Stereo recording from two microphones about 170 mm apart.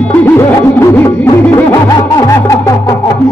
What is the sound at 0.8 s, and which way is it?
Music, 15° left (ahead or behind).